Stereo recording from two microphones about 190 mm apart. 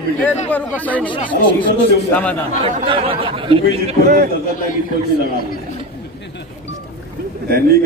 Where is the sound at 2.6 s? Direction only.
30° right (ahead or behind).